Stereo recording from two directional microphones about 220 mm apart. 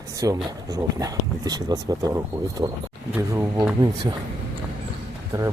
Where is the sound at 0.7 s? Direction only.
15° right (ahead or behind).